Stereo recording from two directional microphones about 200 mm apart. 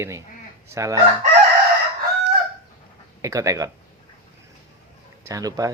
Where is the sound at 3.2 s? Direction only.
15° right (ahead or behind).